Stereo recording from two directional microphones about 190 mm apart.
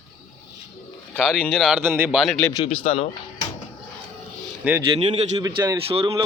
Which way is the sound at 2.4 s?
15° left (ahead or behind).